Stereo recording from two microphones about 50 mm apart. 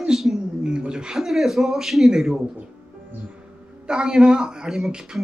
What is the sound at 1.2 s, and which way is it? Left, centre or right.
A man's voice, centre.